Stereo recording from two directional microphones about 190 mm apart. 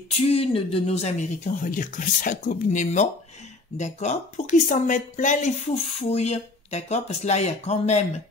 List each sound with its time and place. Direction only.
0.1 s speech: 30° left (ahead or behind)